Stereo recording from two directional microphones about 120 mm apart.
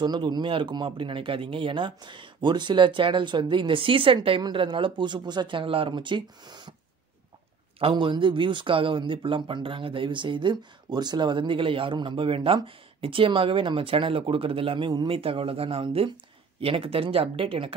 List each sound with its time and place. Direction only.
0.0 s speech: 35° right (ahead or behind)
7.8 s speech: 40° right (ahead or behind)